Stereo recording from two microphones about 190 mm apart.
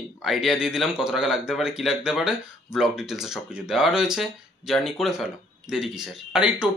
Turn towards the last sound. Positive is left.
turn(degrees=-5)  # may be behind; listen again after turning